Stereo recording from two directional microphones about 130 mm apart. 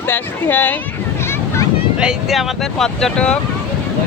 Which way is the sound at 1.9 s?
5° right (ahead or behind).